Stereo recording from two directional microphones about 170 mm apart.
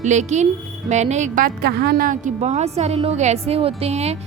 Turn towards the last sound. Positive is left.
turn(degrees=-40)  # may be behind; listen again after turning